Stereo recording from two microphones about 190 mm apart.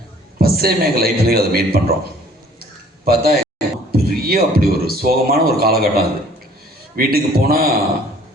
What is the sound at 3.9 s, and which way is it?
A man's voice, 50° right (ahead or behind).